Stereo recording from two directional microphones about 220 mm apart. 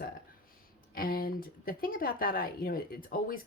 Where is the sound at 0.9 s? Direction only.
40° left (ahead or behind).